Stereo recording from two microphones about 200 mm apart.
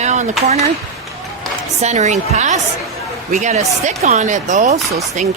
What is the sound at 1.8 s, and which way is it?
Speech, 35° right (ahead or behind).